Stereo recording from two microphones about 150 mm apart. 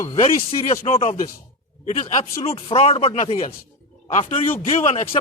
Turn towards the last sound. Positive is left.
turn(degrees=50)  # may be behind; listen again after turning